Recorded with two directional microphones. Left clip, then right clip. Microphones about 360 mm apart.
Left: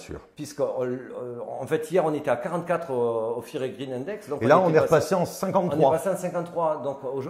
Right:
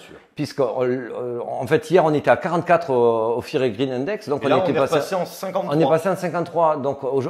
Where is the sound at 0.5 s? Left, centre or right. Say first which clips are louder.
Right 6 dB; right.